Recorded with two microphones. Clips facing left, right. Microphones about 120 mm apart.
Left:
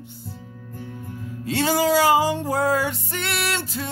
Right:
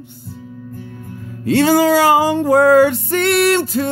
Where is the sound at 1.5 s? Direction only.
65° right (ahead or behind).